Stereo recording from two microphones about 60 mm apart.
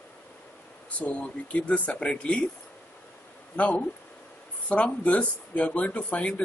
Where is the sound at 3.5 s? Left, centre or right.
Left.